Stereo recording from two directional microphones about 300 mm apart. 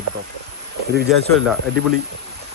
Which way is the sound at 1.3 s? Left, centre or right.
Centre.